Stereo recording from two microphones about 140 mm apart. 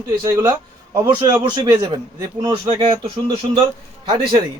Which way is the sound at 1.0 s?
30° right (ahead or behind).